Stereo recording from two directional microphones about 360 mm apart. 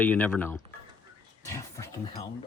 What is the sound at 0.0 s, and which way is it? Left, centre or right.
Speech, centre.